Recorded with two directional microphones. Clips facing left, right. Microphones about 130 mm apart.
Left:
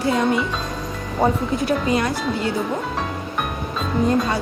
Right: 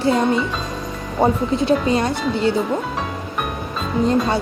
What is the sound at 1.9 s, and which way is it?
Speech, 25° right (ahead or behind).